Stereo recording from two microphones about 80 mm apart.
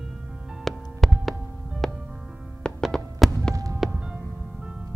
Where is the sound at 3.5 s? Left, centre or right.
Right.